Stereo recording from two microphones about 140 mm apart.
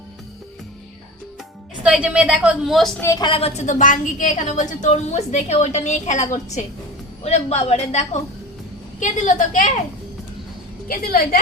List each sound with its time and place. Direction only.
1.8 s a woman's voice: 10° right (ahead or behind)
3.0 s a woman's voice: 25° left (ahead or behind)
3.2 s a woman's voice: 45° left (ahead or behind)
7.3 s a woman's voice: 50° left (ahead or behind)
9.0 s a woman's voice: 65° left (ahead or behind)
10.8 s a woman's voice: 90° left